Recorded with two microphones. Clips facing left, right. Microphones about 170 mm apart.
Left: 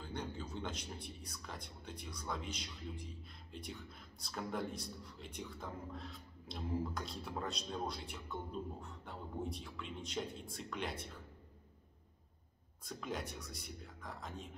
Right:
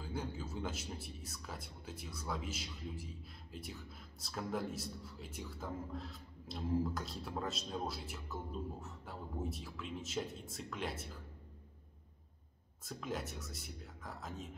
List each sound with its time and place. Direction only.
0.0 s a man's voice: 5° right (ahead or behind)
12.8 s a man's voice: centre (ahead or behind)